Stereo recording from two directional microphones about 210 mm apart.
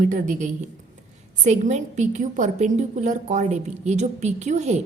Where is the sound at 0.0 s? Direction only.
35° right (ahead or behind).